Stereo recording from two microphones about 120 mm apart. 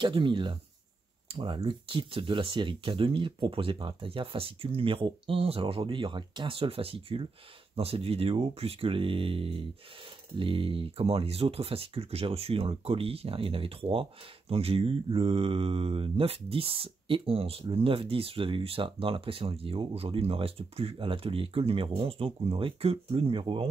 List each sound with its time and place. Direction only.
0.0 s speech: 45° right (ahead or behind)